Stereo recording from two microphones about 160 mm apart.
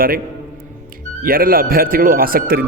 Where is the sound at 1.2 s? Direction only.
65° right (ahead or behind).